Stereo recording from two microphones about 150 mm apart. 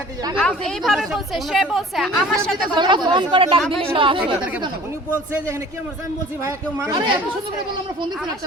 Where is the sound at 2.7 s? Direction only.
30° right (ahead or behind).